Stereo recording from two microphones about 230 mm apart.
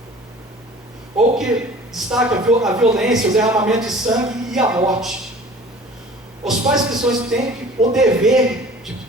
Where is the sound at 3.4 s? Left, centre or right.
Centre.